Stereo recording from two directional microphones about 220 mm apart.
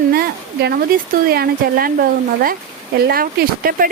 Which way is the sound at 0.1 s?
45° right (ahead or behind).